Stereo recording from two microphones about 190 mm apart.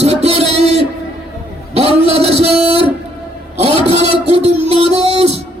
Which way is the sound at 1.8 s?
35° right (ahead or behind).